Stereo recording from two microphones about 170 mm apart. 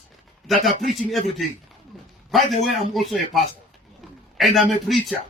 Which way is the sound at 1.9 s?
Centre (ahead or behind).